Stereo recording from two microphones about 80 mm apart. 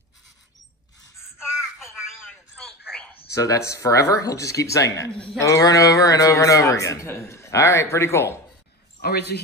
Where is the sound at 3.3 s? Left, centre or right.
Left.